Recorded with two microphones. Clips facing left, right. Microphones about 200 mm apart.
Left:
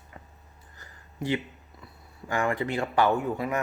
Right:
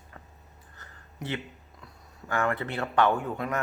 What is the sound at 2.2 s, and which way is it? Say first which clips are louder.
Speech: left 1 dB; 10° left (ahead or behind).